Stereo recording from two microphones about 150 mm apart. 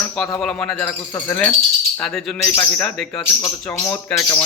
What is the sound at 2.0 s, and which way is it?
Speech, 5° left (ahead or behind).